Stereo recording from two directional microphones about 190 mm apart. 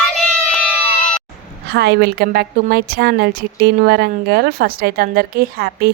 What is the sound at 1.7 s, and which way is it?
A woman's voice, 60° right (ahead or behind).